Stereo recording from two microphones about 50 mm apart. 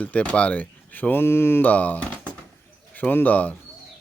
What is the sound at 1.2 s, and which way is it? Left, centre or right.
Mantra, left.